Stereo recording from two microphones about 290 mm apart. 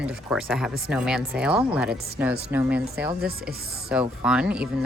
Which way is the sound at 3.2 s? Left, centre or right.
Right.